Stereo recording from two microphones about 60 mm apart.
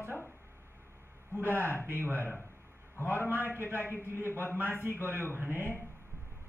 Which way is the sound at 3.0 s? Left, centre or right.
Right.